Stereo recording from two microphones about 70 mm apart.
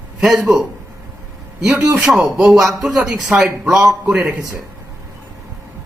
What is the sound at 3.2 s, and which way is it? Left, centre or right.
Speech, centre.